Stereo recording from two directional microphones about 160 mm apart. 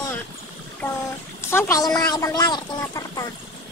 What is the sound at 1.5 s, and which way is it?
Speech, 15° left (ahead or behind).